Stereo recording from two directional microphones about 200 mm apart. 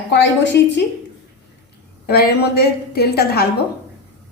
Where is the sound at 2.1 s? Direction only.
50° left (ahead or behind).